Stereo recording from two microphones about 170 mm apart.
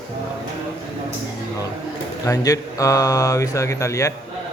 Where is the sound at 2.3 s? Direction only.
20° left (ahead or behind).